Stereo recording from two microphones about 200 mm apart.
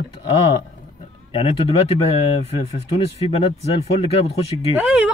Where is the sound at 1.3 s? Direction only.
30° left (ahead or behind).